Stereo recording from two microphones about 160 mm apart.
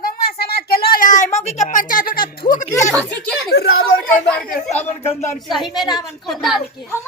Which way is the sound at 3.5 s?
90° left.